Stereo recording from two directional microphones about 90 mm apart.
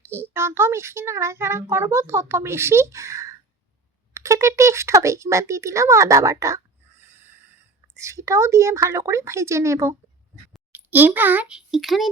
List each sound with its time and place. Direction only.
0.3 s a child's voice: 30° right (ahead or behind)
7.0 s snort: 25° right (ahead or behind)
7.9 s speech: 35° right (ahead or behind)
10.7 s a child's voice: 20° right (ahead or behind)
11.5 s speech: centre (ahead or behind)